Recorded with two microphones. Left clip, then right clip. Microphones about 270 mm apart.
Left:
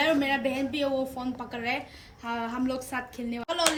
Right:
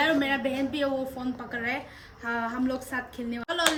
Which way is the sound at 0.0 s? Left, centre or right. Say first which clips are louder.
Even; right.